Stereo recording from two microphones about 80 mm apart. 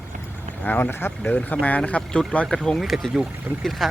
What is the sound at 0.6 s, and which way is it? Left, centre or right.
Speech, left.